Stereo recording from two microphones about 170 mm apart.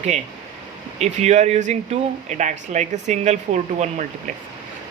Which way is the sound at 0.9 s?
40° right (ahead or behind).